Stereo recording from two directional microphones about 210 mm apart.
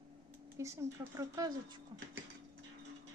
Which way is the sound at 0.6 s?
15° right (ahead or behind).